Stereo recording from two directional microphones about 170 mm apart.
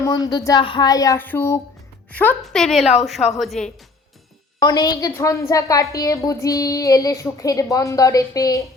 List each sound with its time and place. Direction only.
0.0 s a woman's voice: 25° left (ahead or behind); by 3.7 s centre (ahead or behind)
4.6 s a woman's voice: 25° left (ahead or behind)